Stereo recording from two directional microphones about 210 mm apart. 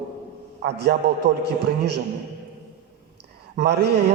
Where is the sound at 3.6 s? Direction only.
50° right (ahead or behind).